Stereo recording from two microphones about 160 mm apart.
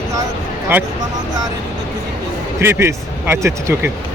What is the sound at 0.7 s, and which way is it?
Speech, 15° right (ahead or behind).